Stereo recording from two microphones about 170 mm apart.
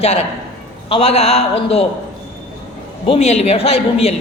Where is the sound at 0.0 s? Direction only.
35° left (ahead or behind).